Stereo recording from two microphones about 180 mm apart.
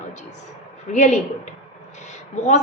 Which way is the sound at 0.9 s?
40° left (ahead or behind).